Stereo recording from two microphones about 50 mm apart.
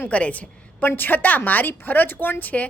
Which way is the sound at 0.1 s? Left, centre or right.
Left.